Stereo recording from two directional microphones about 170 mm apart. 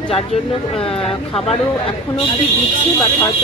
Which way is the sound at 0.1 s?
35° left (ahead or behind).